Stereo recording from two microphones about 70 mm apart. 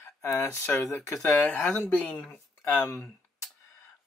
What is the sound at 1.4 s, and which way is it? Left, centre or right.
Speech, centre.